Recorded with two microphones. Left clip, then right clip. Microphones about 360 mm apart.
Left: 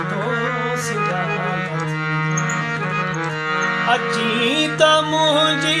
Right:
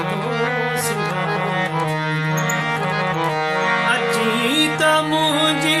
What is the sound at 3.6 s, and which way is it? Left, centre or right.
Music, centre.